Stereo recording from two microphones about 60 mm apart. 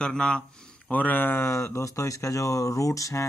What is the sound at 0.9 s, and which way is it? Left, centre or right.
Speech, left.